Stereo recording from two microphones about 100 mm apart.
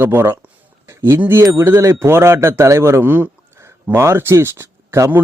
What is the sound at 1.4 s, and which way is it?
A man's voice, 25° right (ahead or behind).